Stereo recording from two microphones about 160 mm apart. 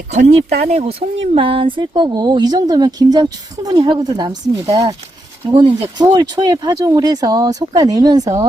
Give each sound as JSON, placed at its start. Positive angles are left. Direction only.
{"t": 0.1, "sound": "speech", "side_deg": -45}